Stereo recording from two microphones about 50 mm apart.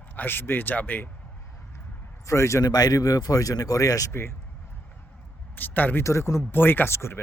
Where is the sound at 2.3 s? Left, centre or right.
Left.